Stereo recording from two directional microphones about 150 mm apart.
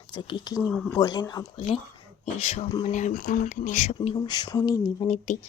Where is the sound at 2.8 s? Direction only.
55° left (ahead or behind).